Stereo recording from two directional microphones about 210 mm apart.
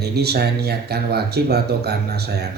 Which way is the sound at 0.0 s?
50° right (ahead or behind).